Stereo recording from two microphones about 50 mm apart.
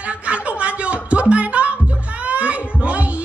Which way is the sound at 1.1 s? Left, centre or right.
Right.